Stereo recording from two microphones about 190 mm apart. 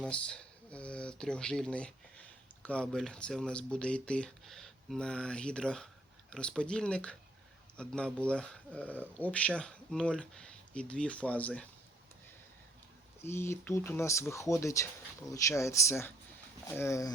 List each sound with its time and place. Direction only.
0.0 s speech: 5° left (ahead or behind)
13.2 s speech: 15° left (ahead or behind)